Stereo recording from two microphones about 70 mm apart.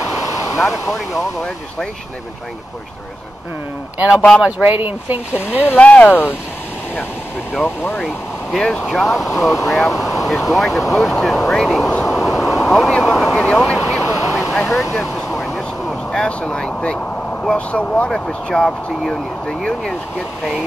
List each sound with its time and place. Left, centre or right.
0.2 s a sound: left
0.6 s speech: centre
4.4 s speech: centre
4.6 s speech: right
5.7 s speech: centre
8.0 s speech: centre
12.1 s vehicle: centre
13.4 s speech: centre
13.7 s a sound: centre
14.0 s vehicle: left
14.5 s speech: centre
15.0 s vehicle: centre
16.1 s speech: centre